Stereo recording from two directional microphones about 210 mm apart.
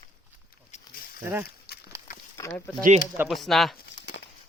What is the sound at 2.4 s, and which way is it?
Speech, 10° left (ahead or behind).